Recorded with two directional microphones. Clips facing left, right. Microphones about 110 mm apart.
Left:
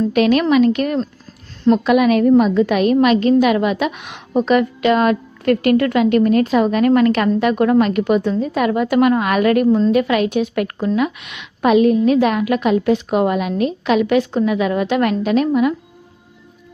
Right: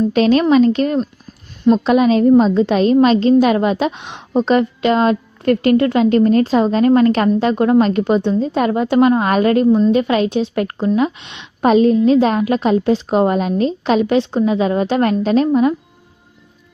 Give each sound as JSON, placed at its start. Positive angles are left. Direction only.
{"t": 0.1, "sound": "a woman's voice", "side_deg": -30}